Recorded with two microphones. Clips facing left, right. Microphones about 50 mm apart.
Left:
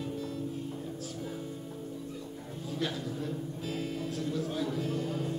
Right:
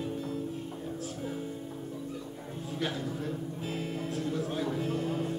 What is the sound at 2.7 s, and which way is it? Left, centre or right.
Speech, right.